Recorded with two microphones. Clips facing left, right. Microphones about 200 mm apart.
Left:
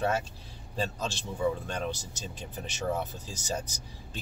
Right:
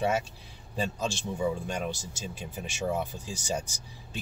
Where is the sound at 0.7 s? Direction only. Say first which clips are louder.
Right 2 dB; 15° right (ahead or behind).